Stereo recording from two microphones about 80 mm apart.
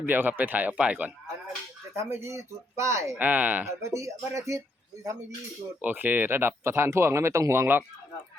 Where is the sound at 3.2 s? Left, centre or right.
Right.